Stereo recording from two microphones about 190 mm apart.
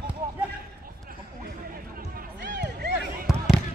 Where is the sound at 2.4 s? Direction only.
65° right (ahead or behind).